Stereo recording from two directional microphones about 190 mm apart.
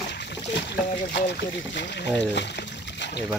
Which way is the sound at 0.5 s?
60° left (ahead or behind).